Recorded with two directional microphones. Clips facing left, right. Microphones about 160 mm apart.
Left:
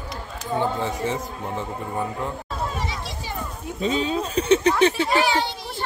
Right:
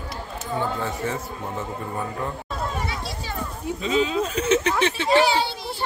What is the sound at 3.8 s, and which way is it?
Speech, 35° left (ahead or behind).